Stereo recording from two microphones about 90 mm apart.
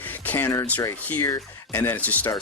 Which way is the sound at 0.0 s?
20° left (ahead or behind).